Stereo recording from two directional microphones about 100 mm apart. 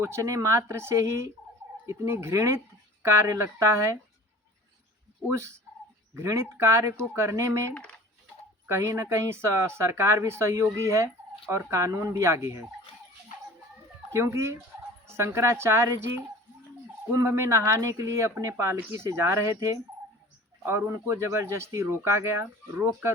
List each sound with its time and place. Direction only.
0.0 s speech: 30° right (ahead or behind)
5.3 s speech: 25° right (ahead or behind)
7.7 s speech: 15° left (ahead or behind)
8.6 s speech: 30° right (ahead or behind)
14.1 s speech: 25° right (ahead or behind)